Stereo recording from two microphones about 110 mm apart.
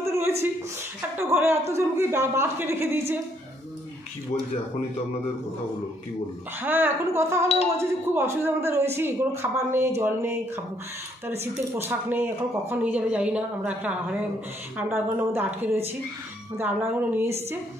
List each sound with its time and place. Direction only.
0.0 s a sound: 25° right (ahead or behind)
1.1 s speech: 20° right (ahead or behind)
6.6 s speech: 20° right (ahead or behind)